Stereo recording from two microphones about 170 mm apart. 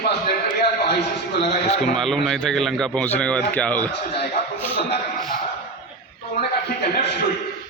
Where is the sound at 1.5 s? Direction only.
40° left (ahead or behind).